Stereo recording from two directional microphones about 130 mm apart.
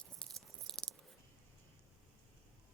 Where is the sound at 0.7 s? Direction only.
5° left (ahead or behind).